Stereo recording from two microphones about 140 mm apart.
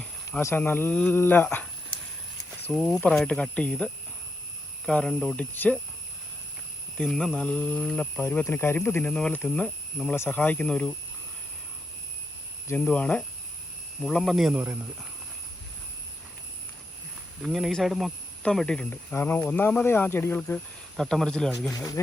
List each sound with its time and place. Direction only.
0.3 s speech: 15° left (ahead or behind)
2.6 s speech: 5° left (ahead or behind)
4.9 s speech: 5° left (ahead or behind)
6.9 s speech: 5° left (ahead or behind)
12.6 s speech: 10° left (ahead or behind)
17.4 s speech: centre (ahead or behind)
20.9 s speech: centre (ahead or behind)
21.7 s speech: 25° left (ahead or behind)